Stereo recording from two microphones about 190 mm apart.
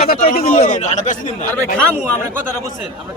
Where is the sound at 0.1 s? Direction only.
50° left (ahead or behind).